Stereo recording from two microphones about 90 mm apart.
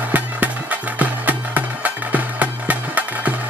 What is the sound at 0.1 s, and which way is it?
Music, 15° right (ahead or behind).